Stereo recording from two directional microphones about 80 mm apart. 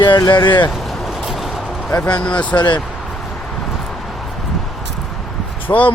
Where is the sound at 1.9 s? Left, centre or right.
Centre.